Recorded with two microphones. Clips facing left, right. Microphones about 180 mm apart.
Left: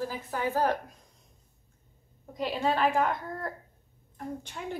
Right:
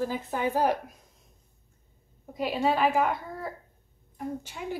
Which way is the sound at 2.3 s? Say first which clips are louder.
Right 2 dB; 10° right (ahead or behind).